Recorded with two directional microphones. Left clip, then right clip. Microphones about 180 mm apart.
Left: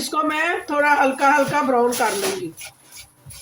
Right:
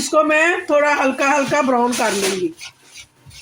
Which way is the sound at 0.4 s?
55° right (ahead or behind).